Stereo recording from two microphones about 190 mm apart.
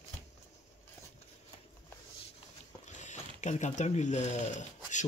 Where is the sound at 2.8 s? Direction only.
40° left (ahead or behind).